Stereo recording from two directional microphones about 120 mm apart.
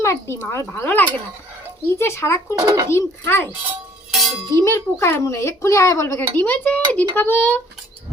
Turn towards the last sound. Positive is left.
turn(degrees=15)  # may be behind; listen again after turning